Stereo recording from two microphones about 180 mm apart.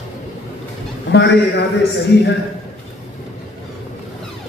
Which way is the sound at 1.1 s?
70° left (ahead or behind).